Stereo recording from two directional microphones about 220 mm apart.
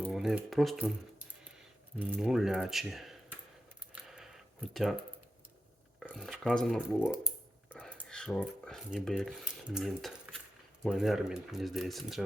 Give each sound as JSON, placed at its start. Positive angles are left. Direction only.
{"t": 0.0, "sound": "speech", "side_deg": 0}
{"t": 2.0, "sound": "speech", "side_deg": -5}
{"t": 3.9, "sound": "a sound", "side_deg": 0}
{"t": 6.0, "sound": "speech", "side_deg": 0}